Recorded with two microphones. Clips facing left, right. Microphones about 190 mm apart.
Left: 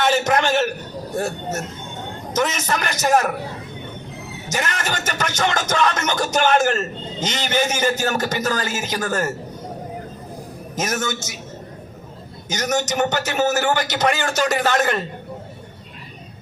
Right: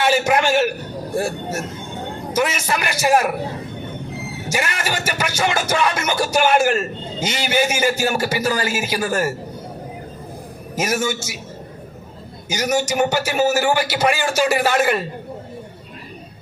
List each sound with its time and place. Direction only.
0.0 s a man's voice: 10° right (ahead or behind)
4.4 s speech: 10° right (ahead or behind)
10.8 s speech: 10° right (ahead or behind)
12.5 s speech: 10° right (ahead or behind)